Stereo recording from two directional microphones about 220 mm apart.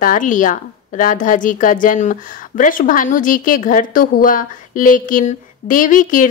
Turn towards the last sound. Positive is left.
turn(degrees=35)  # may be behind; listen again after turning